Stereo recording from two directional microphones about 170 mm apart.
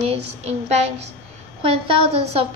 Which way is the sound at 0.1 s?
40° right (ahead or behind).